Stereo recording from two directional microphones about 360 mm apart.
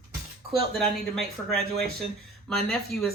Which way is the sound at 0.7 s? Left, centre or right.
Centre.